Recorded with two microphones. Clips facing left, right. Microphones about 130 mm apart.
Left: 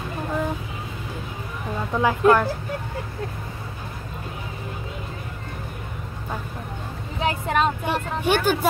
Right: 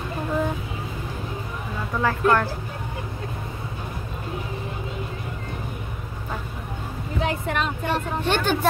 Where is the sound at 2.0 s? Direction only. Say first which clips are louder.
Left 3 dB; 15° left (ahead or behind).